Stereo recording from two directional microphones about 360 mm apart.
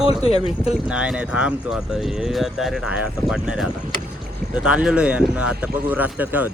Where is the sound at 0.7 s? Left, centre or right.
Centre.